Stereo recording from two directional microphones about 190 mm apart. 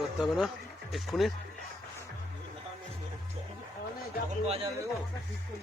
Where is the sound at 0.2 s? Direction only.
Centre (ahead or behind).